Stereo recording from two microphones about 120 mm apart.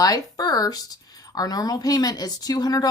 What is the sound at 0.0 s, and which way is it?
Speech, 30° left (ahead or behind).